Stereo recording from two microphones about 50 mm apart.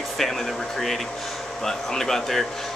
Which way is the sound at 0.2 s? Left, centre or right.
Centre.